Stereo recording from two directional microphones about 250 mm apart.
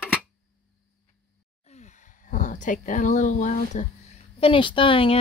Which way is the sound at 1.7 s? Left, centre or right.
Left.